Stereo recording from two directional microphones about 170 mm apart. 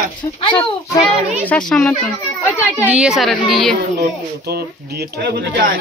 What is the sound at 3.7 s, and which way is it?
Speech, 85° right.